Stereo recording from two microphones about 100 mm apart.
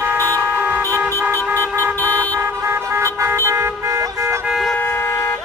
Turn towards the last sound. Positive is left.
turn(degrees=0)  # may be behind; listen again after turning